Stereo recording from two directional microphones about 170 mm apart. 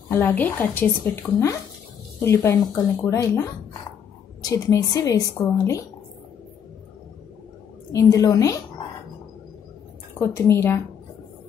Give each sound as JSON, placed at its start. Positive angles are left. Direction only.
{"t": 0.1, "sound": "a woman's voice", "side_deg": 10}
{"t": 7.9, "sound": "a woman's voice", "side_deg": 20}
{"t": 10.1, "sound": "a woman's voice", "side_deg": 15}